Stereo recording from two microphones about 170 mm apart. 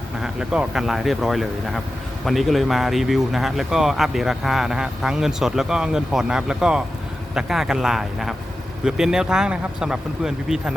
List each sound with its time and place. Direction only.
0.2 s speech: 5° right (ahead or behind)